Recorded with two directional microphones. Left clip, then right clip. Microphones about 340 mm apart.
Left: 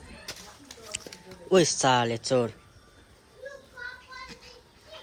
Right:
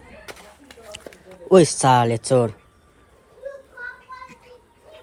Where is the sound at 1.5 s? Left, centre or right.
Centre.